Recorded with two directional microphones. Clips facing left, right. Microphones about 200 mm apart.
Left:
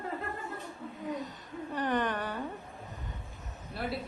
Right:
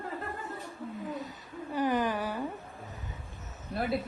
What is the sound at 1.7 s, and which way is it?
Speech, 5° right (ahead or behind).